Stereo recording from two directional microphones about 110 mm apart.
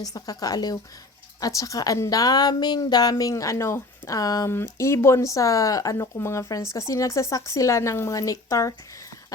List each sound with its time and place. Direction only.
0.0 s a woman's voice: 35° left (ahead or behind)